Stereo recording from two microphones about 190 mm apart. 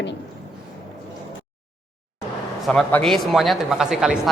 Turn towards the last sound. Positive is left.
turn(degrees=-5)  # may be behind; listen again after turning